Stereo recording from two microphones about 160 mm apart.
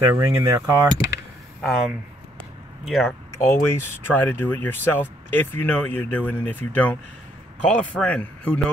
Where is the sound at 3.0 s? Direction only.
15° left (ahead or behind).